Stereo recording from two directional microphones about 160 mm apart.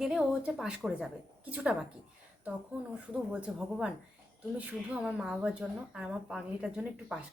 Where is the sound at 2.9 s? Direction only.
5° right (ahead or behind).